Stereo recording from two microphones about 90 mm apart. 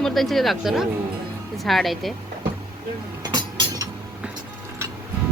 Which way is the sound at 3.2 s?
50° right (ahead or behind).